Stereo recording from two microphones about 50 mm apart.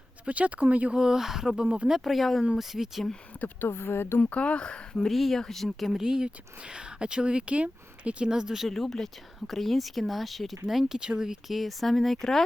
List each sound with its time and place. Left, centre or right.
0.3 s speech: right
0.9 s speech: centre
1.6 s speech: right
1.9 s speech: centre
3.4 s speech: left
4.2 s speech: left
5.1 s speech: centre
6.0 s speech: centre
8.3 s speech: centre